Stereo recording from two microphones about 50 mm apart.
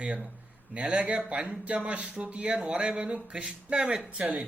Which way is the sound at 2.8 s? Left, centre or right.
Centre.